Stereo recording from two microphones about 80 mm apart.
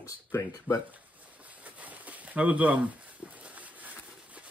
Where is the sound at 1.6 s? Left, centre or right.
Centre.